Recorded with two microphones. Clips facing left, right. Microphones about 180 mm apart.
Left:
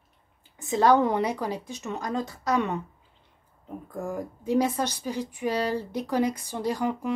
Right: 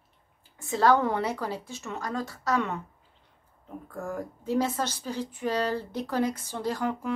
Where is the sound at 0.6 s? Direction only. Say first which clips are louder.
Left 2 dB; 15° left (ahead or behind).